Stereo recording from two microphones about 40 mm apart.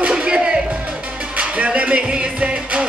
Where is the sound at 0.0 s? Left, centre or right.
Right.